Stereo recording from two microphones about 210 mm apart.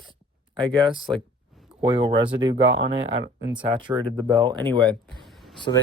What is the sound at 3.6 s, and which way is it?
Speech, 25° right (ahead or behind).